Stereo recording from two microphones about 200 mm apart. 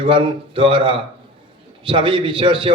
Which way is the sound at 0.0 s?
25° right (ahead or behind).